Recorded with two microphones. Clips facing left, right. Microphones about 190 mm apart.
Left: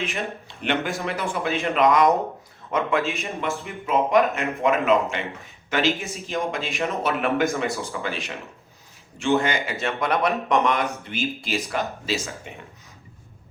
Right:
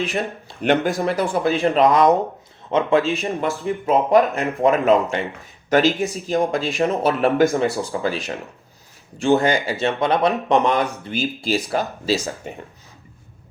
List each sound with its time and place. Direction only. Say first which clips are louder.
0.0 s speech: right 5 dB; 35° right (ahead or behind)